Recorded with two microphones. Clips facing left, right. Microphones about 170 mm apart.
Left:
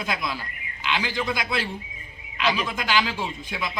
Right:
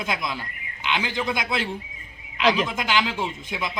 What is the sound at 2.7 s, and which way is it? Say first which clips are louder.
Speech: even; 20° right (ahead or behind).